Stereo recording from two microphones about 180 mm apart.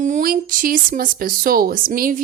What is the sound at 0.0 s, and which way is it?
Speech, 50° right (ahead or behind).